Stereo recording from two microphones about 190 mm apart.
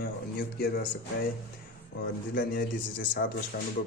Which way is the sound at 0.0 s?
55° left (ahead or behind).